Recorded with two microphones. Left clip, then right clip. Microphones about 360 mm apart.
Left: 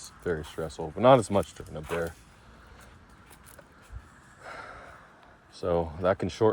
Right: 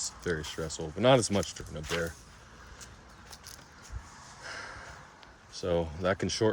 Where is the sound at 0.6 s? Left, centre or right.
Left.